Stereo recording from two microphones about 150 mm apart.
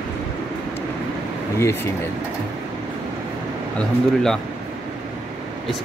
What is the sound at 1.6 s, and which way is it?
Speech, 15° left (ahead or behind).